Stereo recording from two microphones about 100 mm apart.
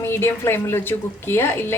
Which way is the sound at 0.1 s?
25° left (ahead or behind).